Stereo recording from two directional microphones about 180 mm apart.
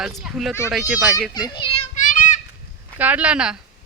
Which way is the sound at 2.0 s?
45° left (ahead or behind).